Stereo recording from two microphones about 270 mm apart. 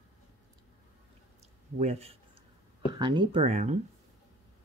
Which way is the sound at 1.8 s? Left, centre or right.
Right.